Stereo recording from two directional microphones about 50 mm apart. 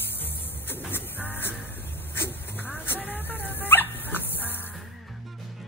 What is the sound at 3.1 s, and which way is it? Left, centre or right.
Music, left.